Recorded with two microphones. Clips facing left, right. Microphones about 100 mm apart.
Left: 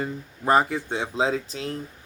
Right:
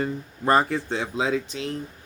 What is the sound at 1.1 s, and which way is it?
Speech, 35° left (ahead or behind).